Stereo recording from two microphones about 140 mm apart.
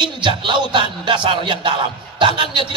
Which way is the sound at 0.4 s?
35° right (ahead or behind).